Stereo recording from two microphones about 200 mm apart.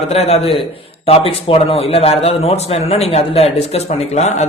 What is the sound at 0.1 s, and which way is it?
Speech, 30° left (ahead or behind).